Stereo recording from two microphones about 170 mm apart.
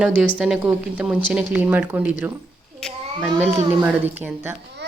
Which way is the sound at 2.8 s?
5° left (ahead or behind).